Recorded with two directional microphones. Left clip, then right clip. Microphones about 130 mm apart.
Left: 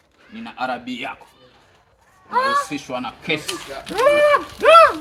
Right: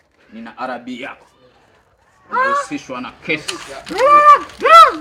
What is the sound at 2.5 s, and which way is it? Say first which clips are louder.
Speech: right 2 dB; 25° left (ahead or behind).